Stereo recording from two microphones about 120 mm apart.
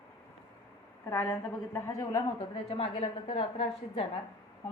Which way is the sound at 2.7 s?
50° left (ahead or behind).